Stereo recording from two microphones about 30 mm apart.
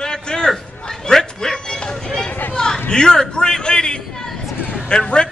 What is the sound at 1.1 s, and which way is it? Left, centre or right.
Dog, centre.